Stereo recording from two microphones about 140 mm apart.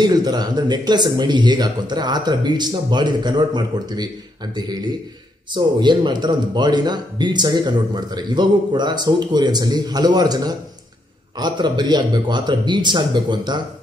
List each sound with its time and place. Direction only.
0.0 s speech: 30° right (ahead or behind)